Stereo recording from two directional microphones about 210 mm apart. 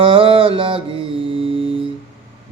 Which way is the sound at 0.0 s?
25° right (ahead or behind).